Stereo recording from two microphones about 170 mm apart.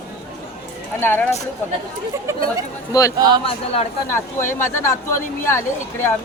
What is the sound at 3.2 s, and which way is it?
Speech, 25° right (ahead or behind).